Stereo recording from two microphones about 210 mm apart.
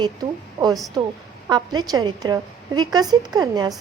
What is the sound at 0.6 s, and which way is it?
A woman's voice, 20° right (ahead or behind).